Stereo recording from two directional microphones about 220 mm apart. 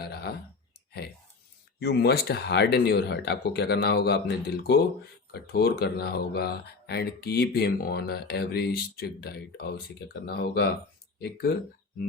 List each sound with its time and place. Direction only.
0.0 s clicking: 45° left (ahead or behind)
1.8 s speech: 45° left (ahead or behind)